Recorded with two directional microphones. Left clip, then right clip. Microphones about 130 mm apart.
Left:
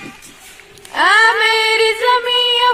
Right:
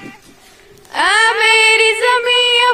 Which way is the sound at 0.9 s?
35° right (ahead or behind).